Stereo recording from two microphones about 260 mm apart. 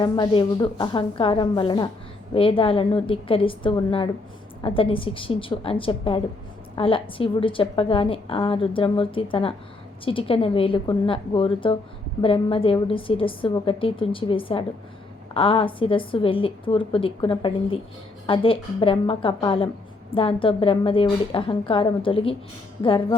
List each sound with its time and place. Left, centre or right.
0.0 s speech: centre